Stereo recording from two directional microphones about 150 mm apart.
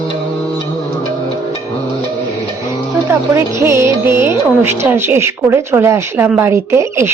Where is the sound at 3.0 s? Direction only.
20° right (ahead or behind).